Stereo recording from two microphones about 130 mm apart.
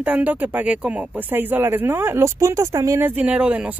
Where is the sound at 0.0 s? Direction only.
10° right (ahead or behind).